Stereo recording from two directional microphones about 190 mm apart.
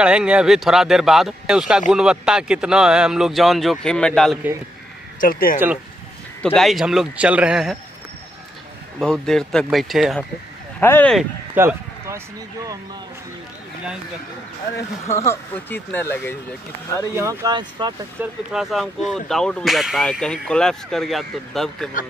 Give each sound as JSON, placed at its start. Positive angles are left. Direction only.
{"t": 0.0, "sound": "speech", "side_deg": -5}
{"t": 5.2, "sound": "speech", "side_deg": 50}
{"t": 6.4, "sound": "speech", "side_deg": 5}
{"t": 9.0, "sound": "speech", "side_deg": 0}
{"t": 10.8, "sound": "speech", "side_deg": 10}
{"t": 11.5, "sound": "speech", "side_deg": -15}
{"t": 15.0, "sound": "speech", "side_deg": 15}
{"t": 17.1, "sound": "speech", "side_deg": -15}
{"t": 18.2, "sound": "speech", "side_deg": -5}